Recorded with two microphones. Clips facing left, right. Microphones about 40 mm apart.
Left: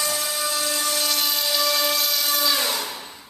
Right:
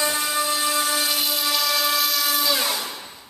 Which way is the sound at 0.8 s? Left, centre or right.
Centre.